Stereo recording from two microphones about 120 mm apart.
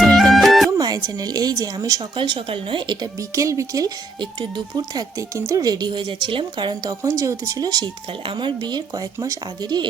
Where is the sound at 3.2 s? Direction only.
25° right (ahead or behind).